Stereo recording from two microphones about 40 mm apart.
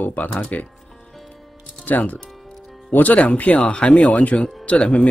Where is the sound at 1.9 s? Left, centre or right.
Left.